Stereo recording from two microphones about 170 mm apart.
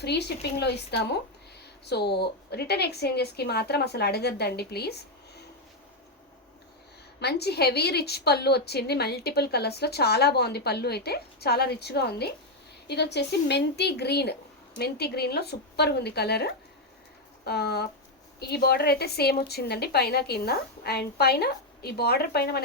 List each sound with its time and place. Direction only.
0.0 s a woman's voice: 80° left
7.2 s a woman's voice: 75° left (ahead or behind)